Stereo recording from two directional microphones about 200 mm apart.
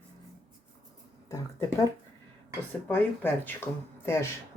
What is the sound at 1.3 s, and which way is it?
Speech, 15° left (ahead or behind).